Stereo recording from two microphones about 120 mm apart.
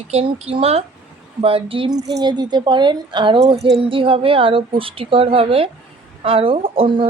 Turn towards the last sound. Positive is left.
turn(degrees=-45)  # may be behind; listen again after turning